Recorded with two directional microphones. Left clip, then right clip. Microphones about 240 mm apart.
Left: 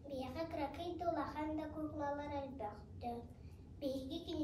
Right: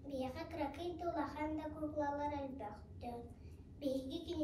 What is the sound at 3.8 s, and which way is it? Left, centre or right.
Speech, centre.